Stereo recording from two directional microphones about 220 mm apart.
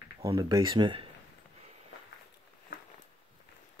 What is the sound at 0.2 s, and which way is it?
Speech, 20° right (ahead or behind).